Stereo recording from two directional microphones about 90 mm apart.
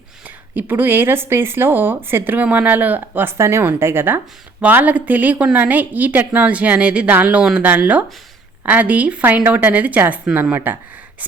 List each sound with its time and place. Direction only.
0.3 s speech: 20° right (ahead or behind)
3.3 s a woman's voice: 30° right (ahead or behind)